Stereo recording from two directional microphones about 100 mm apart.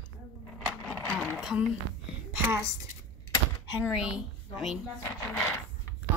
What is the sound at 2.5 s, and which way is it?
Speech, 30° right (ahead or behind).